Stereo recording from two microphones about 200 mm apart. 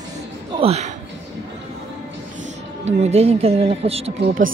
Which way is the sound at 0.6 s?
30° right (ahead or behind).